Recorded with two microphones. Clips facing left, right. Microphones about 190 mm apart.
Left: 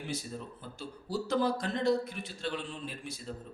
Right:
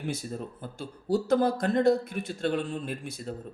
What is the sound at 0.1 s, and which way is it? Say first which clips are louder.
Speech: right 4 dB; 50° right (ahead or behind).